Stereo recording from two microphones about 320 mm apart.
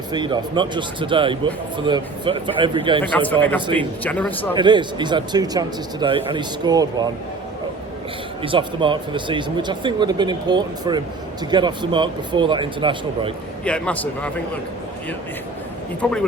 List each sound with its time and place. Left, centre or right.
0.1 s speech: centre
3.0 s speech: centre
4.5 s speech: centre
8.4 s speech: centre
13.7 s speech: centre
16.0 s speech: centre